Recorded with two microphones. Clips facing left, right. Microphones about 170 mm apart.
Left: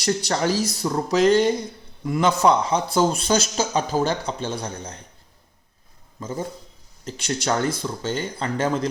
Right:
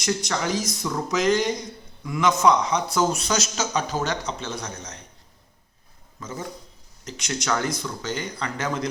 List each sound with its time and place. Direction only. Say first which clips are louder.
0.0 s speech: left 4 dB; 35° left (ahead or behind)
6.1 s speech: left 4 dB; 30° left (ahead or behind)